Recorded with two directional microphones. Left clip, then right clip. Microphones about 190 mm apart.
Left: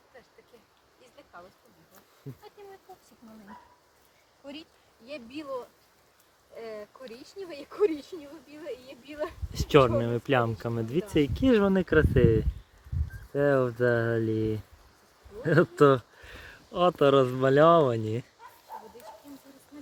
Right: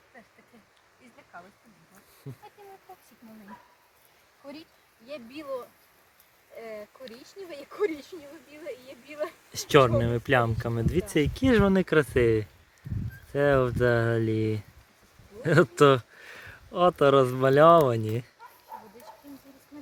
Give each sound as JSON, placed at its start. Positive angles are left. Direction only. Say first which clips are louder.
{"t": 5.0, "sound": "speech", "louder": "right 1 dB", "side_deg": 15}
{"t": 9.2, "sound": "speech", "louder": "right 1 dB", "side_deg": 5}
{"t": 14.3, "sound": "speech", "louder": "right 1 dB", "side_deg": -50}
{"t": 15.4, "sound": "speech", "louder": "right 1 dB", "side_deg": 0}